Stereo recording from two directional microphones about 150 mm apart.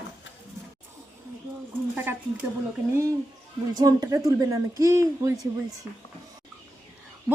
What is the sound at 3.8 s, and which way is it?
A woman's voice, 25° right (ahead or behind).